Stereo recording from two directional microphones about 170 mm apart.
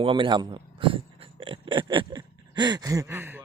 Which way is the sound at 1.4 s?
30° right (ahead or behind).